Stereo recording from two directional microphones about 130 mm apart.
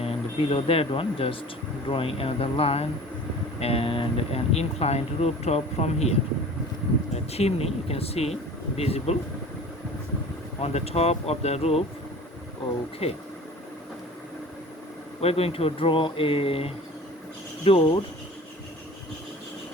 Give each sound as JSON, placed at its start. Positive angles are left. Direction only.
{"t": 0.0, "sound": "speech", "side_deg": 50}
{"t": 7.3, "sound": "speech", "side_deg": 55}
{"t": 10.6, "sound": "speech", "side_deg": 55}
{"t": 13.0, "sound": "speech", "side_deg": 55}
{"t": 15.2, "sound": "speech", "side_deg": 50}